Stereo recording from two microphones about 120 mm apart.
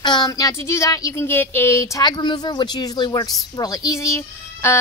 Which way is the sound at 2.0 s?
35° left (ahead or behind).